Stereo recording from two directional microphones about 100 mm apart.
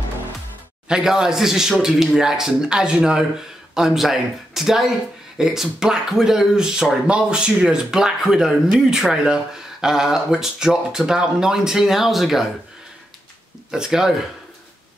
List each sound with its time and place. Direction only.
0.8 s speech: 5° right (ahead or behind)
13.7 s speech: 5° right (ahead or behind)